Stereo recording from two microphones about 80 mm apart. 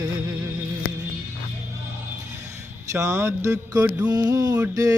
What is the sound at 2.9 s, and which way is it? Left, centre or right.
Mantra, right.